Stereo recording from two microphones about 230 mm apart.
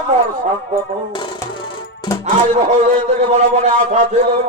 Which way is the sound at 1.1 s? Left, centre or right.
Centre.